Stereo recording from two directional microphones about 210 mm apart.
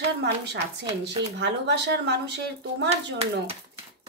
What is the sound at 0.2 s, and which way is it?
Speech, 55° right (ahead or behind).